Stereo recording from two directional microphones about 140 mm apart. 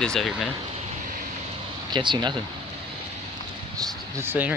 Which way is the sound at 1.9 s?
35° right (ahead or behind).